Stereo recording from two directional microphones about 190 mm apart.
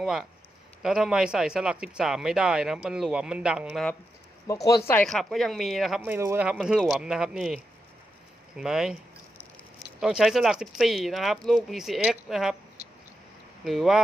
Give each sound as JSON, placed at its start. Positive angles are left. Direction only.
{"t": 0.0, "sound": "speech", "side_deg": 0}
{"t": 4.5, "sound": "speech", "side_deg": 15}
{"t": 4.9, "sound": "speech", "side_deg": 5}
{"t": 6.0, "sound": "speech", "side_deg": -15}
{"t": 8.5, "sound": "speech", "side_deg": -5}
{"t": 10.0, "sound": "speech", "side_deg": 0}
{"t": 13.7, "sound": "speech", "side_deg": 0}